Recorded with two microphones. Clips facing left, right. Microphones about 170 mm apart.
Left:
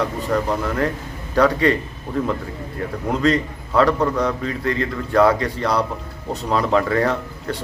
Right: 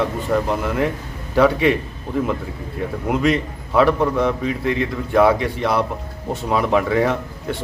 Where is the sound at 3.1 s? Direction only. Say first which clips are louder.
Even; 15° right (ahead or behind).